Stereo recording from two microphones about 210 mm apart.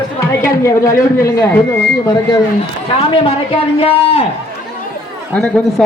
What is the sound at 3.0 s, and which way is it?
A man's voice, 25° left (ahead or behind).